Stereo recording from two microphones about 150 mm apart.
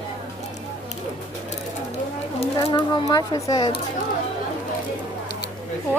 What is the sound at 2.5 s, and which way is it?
Speech, 25° left (ahead or behind).